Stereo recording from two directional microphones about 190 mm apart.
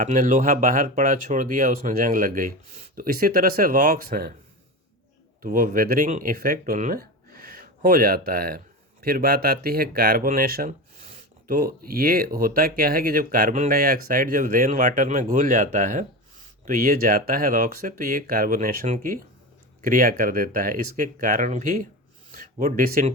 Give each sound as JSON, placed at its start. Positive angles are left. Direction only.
{"t": 0.0, "sound": "speech", "side_deg": -45}
{"t": 5.4, "sound": "speech", "side_deg": -45}